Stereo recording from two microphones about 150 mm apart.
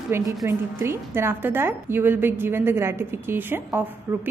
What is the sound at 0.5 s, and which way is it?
A woman's voice, 15° right (ahead or behind).